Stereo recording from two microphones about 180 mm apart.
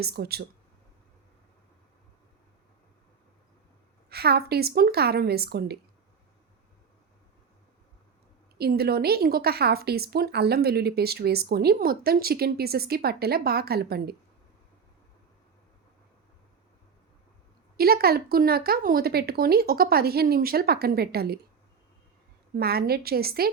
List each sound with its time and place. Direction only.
0.0 s speech: 60° right (ahead or behind)
4.1 s speech: 60° right (ahead or behind)
8.5 s speech: 60° right (ahead or behind)
17.7 s speech: 60° right (ahead or behind)
22.5 s speech: 60° right (ahead or behind)